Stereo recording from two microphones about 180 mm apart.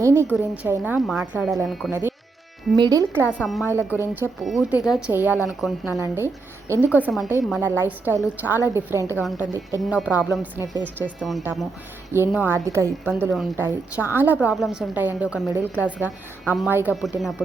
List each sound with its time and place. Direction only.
0.0 s a sound: 15° right (ahead or behind)
0.3 s a woman's voice: 5° right (ahead or behind)
1.9 s a woman's voice: 10° right (ahead or behind)
2.7 s speech: 20° right (ahead or behind)
3.2 s a woman's voice: 5° right (ahead or behind)
4.4 s a woman's voice: centre (ahead or behind)
6.0 s a woman's voice: 15° right (ahead or behind)
11.2 s a woman's voice: centre (ahead or behind)
12.1 s a woman's voice: 10° right (ahead or behind)
13.2 s a woman's voice: centre (ahead or behind)
13.6 s a woman's voice: 10° right (ahead or behind)
16.9 s a woman's voice: centre (ahead or behind)